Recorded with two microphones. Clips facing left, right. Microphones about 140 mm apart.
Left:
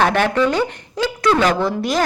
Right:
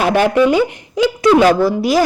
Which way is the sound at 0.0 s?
10° right (ahead or behind).